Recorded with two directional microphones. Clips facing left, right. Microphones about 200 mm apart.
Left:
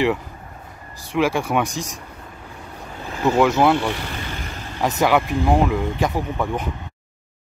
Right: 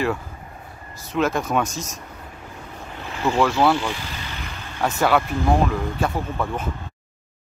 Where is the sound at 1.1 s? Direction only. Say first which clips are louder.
Left 2 dB; 10° left (ahead or behind).